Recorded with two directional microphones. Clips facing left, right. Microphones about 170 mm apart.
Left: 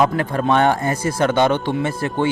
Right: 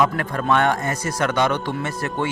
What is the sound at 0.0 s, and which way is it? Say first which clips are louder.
A man's voice: left 3 dB; 30° left (ahead or behind).